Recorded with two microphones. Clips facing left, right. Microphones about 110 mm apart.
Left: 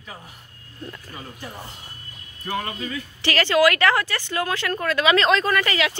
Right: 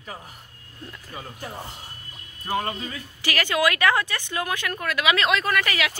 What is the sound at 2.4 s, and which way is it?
Speech, 30° right (ahead or behind).